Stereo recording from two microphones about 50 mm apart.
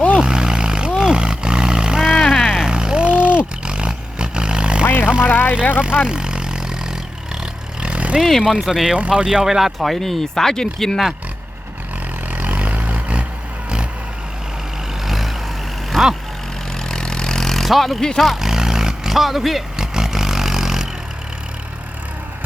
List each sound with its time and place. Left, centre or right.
0.2 s a sound: centre
0.9 s roar: centre
2.2 s vehicle: centre
5.3 s vehicle: left
6.1 s vehicle: centre
7.8 s vehicle: right
8.4 s speech: centre
9.0 s speech: right
9.7 s speech: centre
12.3 s vehicle: right
15.0 s vehicle: centre
15.9 s vehicle: centre
17.7 s speech: centre
18.2 s vehicle: centre